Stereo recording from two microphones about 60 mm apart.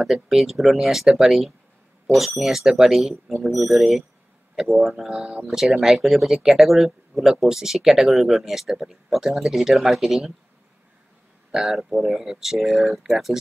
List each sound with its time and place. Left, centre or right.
0.0 s speech: centre
11.5 s speech: centre